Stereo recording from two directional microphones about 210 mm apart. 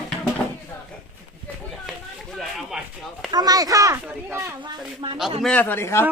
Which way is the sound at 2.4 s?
Centre (ahead or behind).